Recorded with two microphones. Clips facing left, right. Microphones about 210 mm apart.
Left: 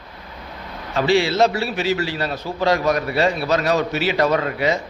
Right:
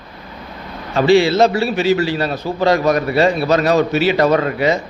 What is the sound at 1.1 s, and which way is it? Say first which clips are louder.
Speech: right 6 dB; 25° right (ahead or behind).